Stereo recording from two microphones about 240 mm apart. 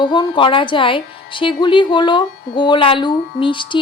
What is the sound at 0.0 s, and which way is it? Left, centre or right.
A woman's voice, centre.